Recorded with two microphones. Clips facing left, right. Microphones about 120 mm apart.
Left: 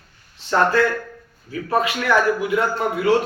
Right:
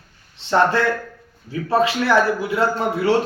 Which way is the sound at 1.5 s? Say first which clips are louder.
Right 3 dB; 25° right (ahead or behind).